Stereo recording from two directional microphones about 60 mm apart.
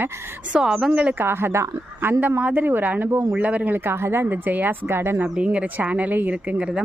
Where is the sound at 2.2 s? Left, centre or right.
Right.